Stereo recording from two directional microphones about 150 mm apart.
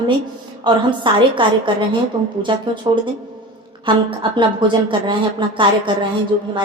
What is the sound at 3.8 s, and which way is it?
Speech, 30° right (ahead or behind).